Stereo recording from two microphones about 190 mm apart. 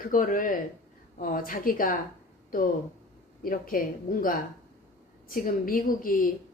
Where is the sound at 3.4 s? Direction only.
50° left (ahead or behind).